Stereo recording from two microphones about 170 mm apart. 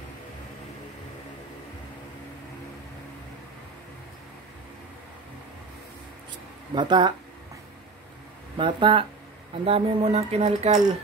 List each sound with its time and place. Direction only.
6.7 s speech: 25° right (ahead or behind)
8.5 s speech: 30° right (ahead or behind)